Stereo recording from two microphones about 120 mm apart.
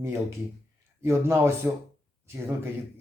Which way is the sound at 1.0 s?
20° right (ahead or behind).